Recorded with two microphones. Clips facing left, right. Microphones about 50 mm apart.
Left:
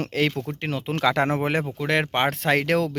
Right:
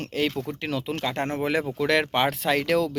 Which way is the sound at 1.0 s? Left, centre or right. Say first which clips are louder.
Left 11 dB; left.